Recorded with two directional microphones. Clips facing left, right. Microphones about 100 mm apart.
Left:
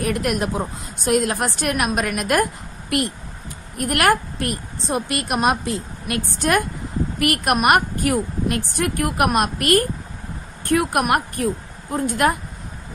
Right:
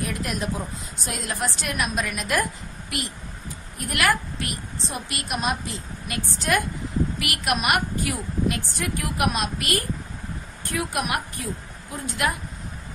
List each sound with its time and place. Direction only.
0.0 s a woman's voice: 60° left (ahead or behind)